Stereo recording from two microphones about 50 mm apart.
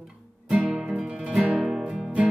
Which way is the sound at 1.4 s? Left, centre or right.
Right.